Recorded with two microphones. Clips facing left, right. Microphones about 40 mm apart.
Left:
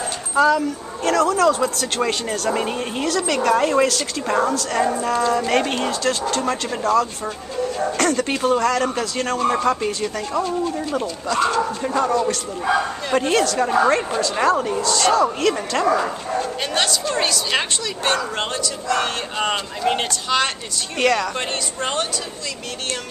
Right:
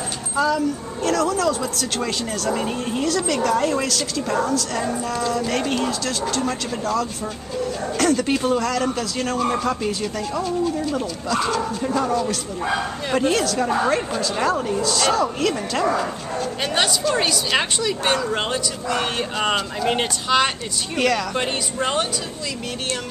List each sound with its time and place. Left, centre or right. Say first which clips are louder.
0.6 s a woman's voice: right 1 dB; centre
1.8 s speech: left 3 dB; left
3.3 s a woman's voice: left 5 dB; left
3.6 s speech: left 4 dB; centre
8.0 s speech: right 2 dB; centre
13.1 s speech: left 1 dB; centre
14.8 s speech: left 2 dB; centre
16.6 s speech: right 5 dB; centre
21.0 s speech: left 1 dB; centre